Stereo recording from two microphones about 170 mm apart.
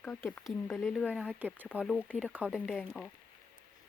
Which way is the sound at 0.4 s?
Centre (ahead or behind).